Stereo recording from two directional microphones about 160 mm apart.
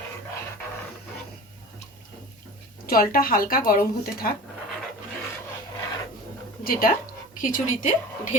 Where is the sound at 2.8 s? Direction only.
65° left (ahead or behind).